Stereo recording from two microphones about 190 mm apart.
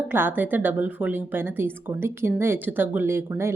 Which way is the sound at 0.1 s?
10° right (ahead or behind).